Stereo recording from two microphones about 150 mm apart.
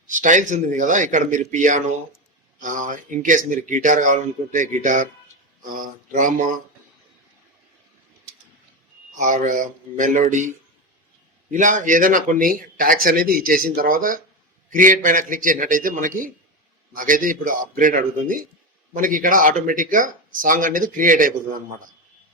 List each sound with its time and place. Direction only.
0.1 s speech: 55° right (ahead or behind)
9.1 s speech: 55° right (ahead or behind)
11.5 s speech: 55° right (ahead or behind)